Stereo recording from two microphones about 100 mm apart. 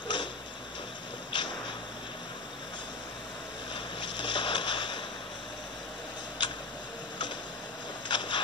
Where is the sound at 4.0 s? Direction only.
50° left (ahead or behind).